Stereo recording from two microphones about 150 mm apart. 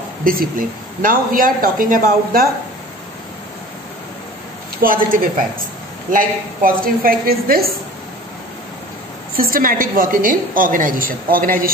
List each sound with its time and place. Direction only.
0.2 s a woman's voice: 70° right (ahead or behind)
4.8 s a woman's voice: 70° right (ahead or behind); by 7.7 s 85° right
9.4 s a woman's voice: 70° right (ahead or behind)